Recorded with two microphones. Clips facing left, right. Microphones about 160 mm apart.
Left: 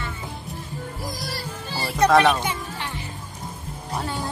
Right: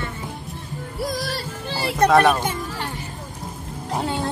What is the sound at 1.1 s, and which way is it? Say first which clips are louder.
Music: right 4 dB; 70° right (ahead or behind).